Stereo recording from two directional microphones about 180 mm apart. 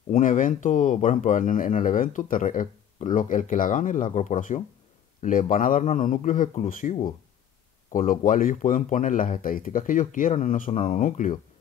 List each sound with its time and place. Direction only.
0.1 s speech: 45° left (ahead or behind)